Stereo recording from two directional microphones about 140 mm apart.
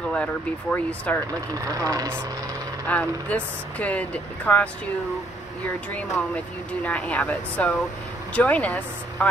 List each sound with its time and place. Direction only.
0.1 s speech: 10° left (ahead or behind)
1.5 s speech: 25° right (ahead or behind)
2.9 s speech: 10° left (ahead or behind)
5.9 s speech: 10° left (ahead or behind)